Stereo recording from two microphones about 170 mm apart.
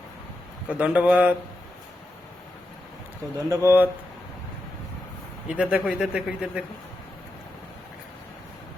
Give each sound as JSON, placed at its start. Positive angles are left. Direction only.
{"t": 0.7, "sound": "speech", "side_deg": -10}
{"t": 3.5, "sound": "speech", "side_deg": -15}
{"t": 5.5, "sound": "speech", "side_deg": -5}